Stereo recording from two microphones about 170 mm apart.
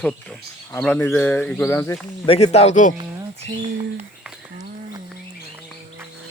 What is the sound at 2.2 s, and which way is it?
Speech, 35° left (ahead or behind).